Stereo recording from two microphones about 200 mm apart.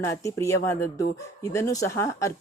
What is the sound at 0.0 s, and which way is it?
Speech, 15° left (ahead or behind).